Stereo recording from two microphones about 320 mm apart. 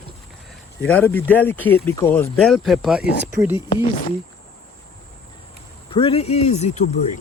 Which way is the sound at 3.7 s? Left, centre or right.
Left.